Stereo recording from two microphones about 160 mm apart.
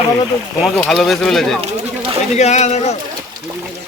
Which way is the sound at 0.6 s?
Centre (ahead or behind).